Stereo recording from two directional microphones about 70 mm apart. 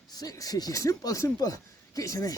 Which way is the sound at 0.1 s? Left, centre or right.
Left.